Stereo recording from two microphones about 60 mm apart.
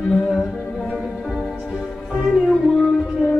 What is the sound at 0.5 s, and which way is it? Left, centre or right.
Music, centre.